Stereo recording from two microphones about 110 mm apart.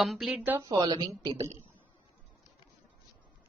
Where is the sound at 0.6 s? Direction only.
40° right (ahead or behind).